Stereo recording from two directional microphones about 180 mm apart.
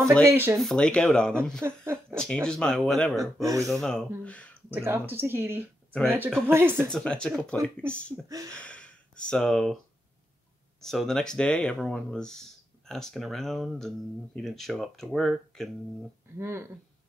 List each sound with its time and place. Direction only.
0.2 s speech: 15° right (ahead or behind)
0.6 s speech: 5° left (ahead or behind)
1.6 s speech: 15° right (ahead or behind)
2.1 s speech: 5° left (ahead or behind)
3.2 s speech: 15° right (ahead or behind)
3.6 s speech: centre (ahead or behind)
4.6 s speech: 10° right (ahead or behind)
6.9 s speech: 5° left (ahead or behind)
8.5 s a sound: 5° left (ahead or behind)
10.8 s speech: centre (ahead or behind)
16.3 s speech: 15° right (ahead or behind)